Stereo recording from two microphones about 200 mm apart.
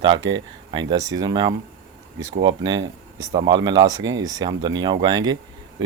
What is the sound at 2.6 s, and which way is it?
Speech, 20° right (ahead or behind).